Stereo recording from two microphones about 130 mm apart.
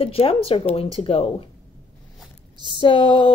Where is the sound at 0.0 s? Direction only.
45° left (ahead or behind).